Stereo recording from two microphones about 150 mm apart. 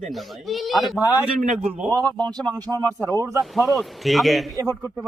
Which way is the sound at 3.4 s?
Centre (ahead or behind).